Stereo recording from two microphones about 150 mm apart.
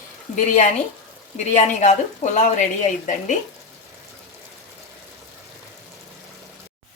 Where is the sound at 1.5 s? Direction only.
50° left (ahead or behind).